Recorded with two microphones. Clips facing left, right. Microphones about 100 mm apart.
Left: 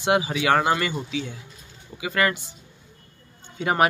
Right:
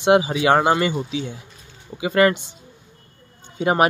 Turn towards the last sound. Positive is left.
turn(degrees=-15)  # may be behind; listen again after turning